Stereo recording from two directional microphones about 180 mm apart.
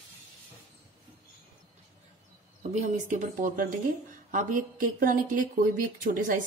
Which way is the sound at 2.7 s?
40° right (ahead or behind).